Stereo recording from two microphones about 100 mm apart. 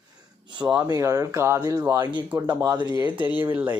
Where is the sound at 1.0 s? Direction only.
30° right (ahead or behind).